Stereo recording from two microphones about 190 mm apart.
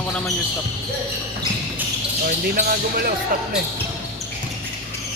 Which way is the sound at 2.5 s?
50° right (ahead or behind).